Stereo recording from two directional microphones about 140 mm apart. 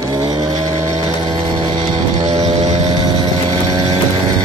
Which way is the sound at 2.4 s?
50° right (ahead or behind).